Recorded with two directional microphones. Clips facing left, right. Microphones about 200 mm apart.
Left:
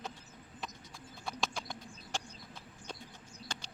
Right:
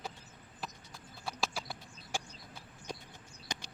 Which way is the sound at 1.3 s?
5° right (ahead or behind).